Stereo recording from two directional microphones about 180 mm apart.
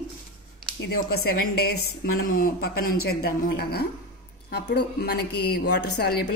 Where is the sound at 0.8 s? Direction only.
60° left (ahead or behind).